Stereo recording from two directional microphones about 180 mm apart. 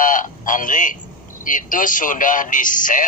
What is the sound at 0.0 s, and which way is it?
A man's voice, 50° left (ahead or behind).